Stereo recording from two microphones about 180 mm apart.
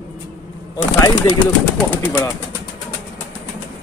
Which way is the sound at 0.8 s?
20° left (ahead or behind).